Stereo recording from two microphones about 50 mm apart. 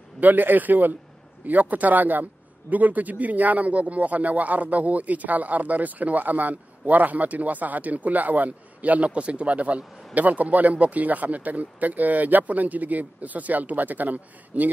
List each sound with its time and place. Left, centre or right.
0.2 s a man's voice: right